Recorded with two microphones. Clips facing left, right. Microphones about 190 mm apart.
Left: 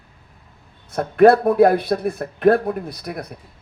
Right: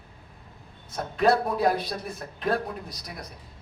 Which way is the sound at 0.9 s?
60° left (ahead or behind).